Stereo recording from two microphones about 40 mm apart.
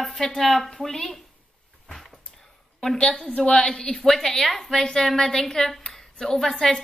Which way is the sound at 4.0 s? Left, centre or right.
Centre.